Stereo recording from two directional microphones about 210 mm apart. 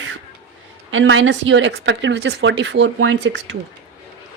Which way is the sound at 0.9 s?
65° right (ahead or behind).